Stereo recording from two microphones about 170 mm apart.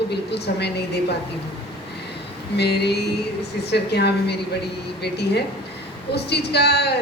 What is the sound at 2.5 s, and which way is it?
A man's voice, 75° left (ahead or behind).